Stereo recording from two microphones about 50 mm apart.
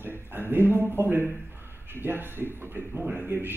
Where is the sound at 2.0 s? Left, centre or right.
Right.